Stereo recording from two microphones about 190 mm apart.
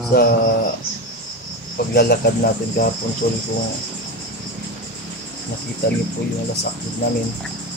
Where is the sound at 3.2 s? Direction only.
60° left (ahead or behind).